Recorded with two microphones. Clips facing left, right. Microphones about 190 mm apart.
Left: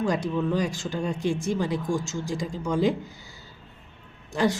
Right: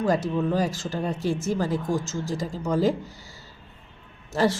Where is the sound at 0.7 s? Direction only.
Centre (ahead or behind).